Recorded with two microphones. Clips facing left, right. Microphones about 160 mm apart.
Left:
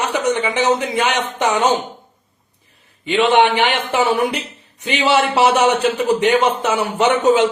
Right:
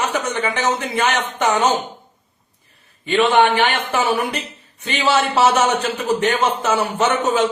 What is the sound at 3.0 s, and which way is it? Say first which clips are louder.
Speech: left 1 dB; 15° left (ahead or behind).